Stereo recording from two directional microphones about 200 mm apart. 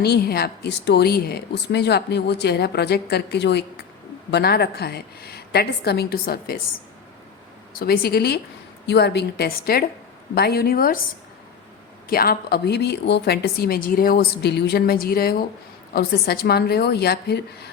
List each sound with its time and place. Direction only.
0.0 s a woman's voice: 50° left (ahead or behind)
7.7 s a woman's voice: 50° left (ahead or behind)
12.0 s a woman's voice: 50° left (ahead or behind)